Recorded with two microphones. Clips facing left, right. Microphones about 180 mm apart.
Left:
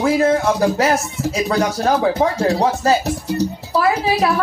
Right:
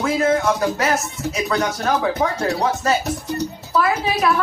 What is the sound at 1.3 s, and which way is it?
A woman's voice, 30° left (ahead or behind).